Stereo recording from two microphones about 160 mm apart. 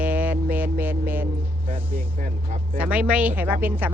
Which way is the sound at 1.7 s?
60° right (ahead or behind).